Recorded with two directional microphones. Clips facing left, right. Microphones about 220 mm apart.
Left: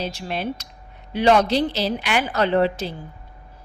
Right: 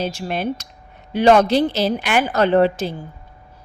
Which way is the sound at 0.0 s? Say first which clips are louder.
Right 4 dB; 50° right (ahead or behind).